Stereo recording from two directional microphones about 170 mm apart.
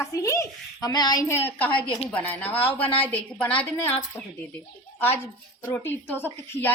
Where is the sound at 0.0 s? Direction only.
20° left (ahead or behind).